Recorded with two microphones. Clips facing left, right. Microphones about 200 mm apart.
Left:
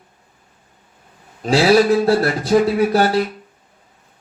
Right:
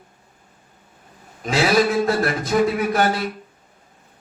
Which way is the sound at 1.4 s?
35° left (ahead or behind).